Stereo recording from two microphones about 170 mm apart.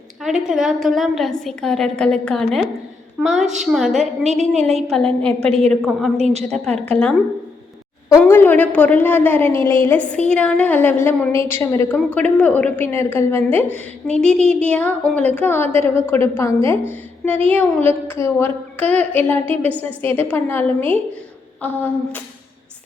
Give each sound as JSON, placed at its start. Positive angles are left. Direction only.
{"t": 0.2, "sound": "a woman's voice", "side_deg": 0}
{"t": 4.0, "sound": "a woman's voice", "side_deg": -40}
{"t": 4.9, "sound": "a woman's voice", "side_deg": 5}
{"t": 5.5, "sound": "a woman's voice", "side_deg": -35}
{"t": 6.8, "sound": "a woman's voice", "side_deg": 10}
{"t": 8.2, "sound": "a woman's voice", "side_deg": 10}